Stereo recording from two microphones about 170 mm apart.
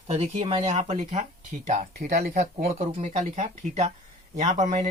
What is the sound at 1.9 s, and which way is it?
Speech, 65° right (ahead or behind).